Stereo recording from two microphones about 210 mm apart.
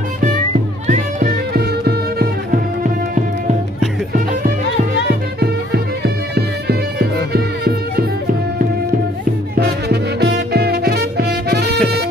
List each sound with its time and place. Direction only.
0.8 s music: 40° right (ahead or behind)
5.4 s music: 50° right (ahead or behind)
9.6 s music: 50° right (ahead or behind)